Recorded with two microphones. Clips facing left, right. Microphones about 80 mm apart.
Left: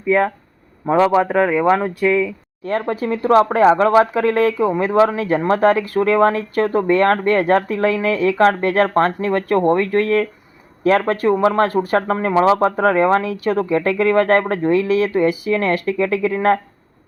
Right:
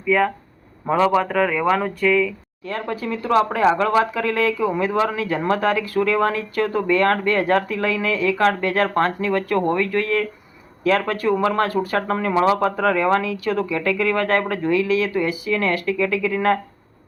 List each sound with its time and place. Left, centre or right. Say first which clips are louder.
0.9 s a man's voice: left 3 dB; centre
2.6 s speech: left 6 dB; left